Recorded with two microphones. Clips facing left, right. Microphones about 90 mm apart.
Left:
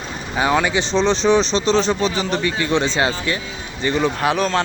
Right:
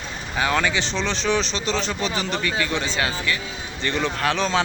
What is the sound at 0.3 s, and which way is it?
Speech, 20° left (ahead or behind).